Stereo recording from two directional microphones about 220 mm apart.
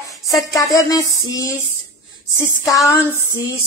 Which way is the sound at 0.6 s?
15° left (ahead or behind).